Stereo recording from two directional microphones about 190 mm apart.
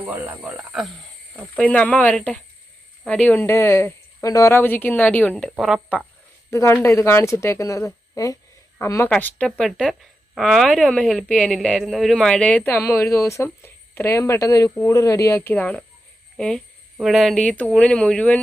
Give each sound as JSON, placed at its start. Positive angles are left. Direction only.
{"t": 0.0, "sound": "speech", "side_deg": -10}
{"t": 6.5, "sound": "speech", "side_deg": 15}